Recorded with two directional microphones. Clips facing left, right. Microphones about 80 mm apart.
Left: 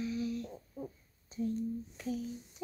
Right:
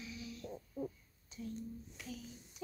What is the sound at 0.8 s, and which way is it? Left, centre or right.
Owl, left.